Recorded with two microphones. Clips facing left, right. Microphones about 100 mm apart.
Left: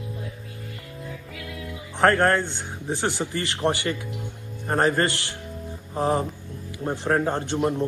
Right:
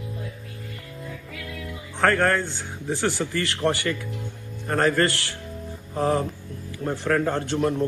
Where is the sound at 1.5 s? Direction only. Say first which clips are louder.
Left 1 dB; 15° left (ahead or behind).